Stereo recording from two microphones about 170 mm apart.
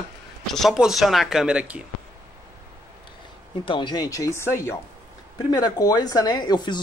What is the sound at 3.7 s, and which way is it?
Speech, 25° left (ahead or behind).